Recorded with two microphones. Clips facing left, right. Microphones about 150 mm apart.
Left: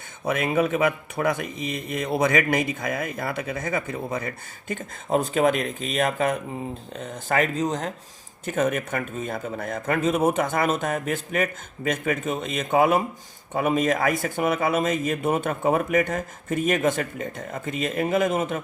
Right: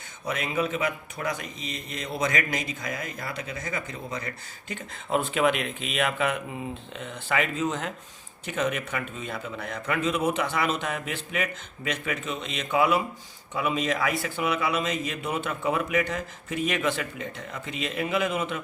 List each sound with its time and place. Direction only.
0.3 s speech: 55° left (ahead or behind)
4.7 s speech: 40° left (ahead or behind)
8.4 s a man's voice: 50° left (ahead or behind)